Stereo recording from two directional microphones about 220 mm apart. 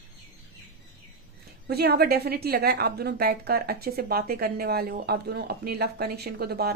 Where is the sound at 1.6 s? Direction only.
45° right (ahead or behind).